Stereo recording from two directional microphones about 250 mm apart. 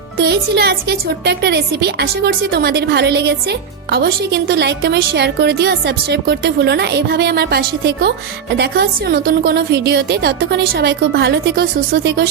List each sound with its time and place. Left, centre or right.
0.2 s a woman's voice: right